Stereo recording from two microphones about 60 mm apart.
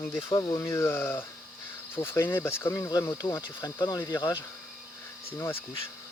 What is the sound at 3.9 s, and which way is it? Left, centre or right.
Speech, left.